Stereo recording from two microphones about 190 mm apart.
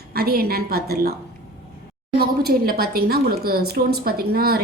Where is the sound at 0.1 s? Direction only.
55° right (ahead or behind).